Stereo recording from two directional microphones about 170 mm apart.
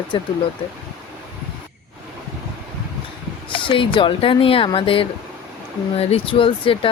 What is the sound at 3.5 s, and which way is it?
Speech, 30° left (ahead or behind).